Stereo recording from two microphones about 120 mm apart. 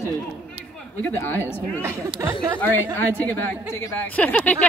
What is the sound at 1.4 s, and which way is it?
Speech, 20° right (ahead or behind).